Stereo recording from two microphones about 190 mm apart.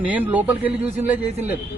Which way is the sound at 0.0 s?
10° right (ahead or behind).